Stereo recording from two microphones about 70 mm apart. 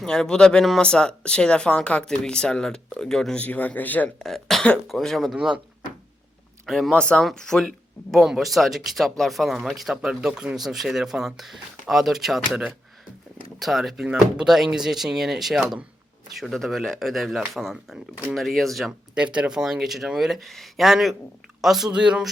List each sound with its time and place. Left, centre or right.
0.0 s speech: centre
3.3 s speech: left
4.2 s speech: centre
6.7 s speech: centre
6.9 s speech: centre
14.0 s speech: centre
18.9 s speech: centre
21.8 s speech: centre